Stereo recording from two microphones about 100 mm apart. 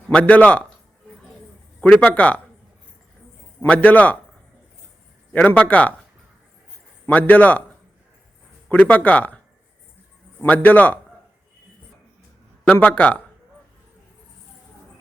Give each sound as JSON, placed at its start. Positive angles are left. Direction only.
{"t": 0.1, "sound": "speech", "side_deg": 15}
{"t": 1.8, "sound": "speech", "side_deg": 15}
{"t": 3.7, "sound": "speech", "side_deg": 15}
{"t": 5.3, "sound": "speech", "side_deg": 15}
{"t": 7.1, "sound": "speech", "side_deg": 15}
{"t": 8.7, "sound": "speech", "side_deg": 15}
{"t": 10.5, "sound": "speech", "side_deg": 15}
{"t": 12.6, "sound": "speech", "side_deg": 15}